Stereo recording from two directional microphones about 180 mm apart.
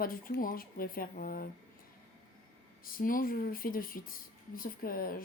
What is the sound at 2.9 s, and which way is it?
Speech, 50° left (ahead or behind).